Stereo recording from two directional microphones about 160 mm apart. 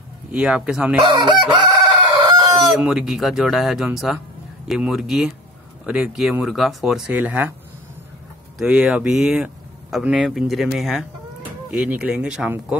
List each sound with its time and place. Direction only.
0.3 s speech: 5° right (ahead or behind)
1.0 s chicken: 30° right (ahead or behind)
2.7 s speech: 5° right (ahead or behind)
8.5 s speech: 5° right (ahead or behind)